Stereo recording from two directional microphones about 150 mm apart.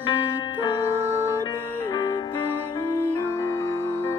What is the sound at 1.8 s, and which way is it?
Music, 15° left (ahead or behind).